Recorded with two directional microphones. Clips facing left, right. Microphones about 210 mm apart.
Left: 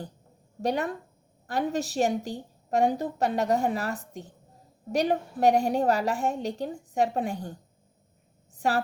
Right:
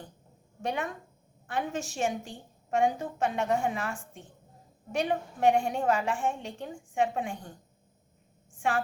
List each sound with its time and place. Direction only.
0.6 s a woman's voice: 35° left (ahead or behind)
8.5 s a woman's voice: 40° left (ahead or behind)